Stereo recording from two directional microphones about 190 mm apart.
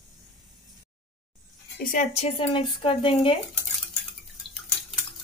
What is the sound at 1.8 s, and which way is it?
Speech, 45° left (ahead or behind).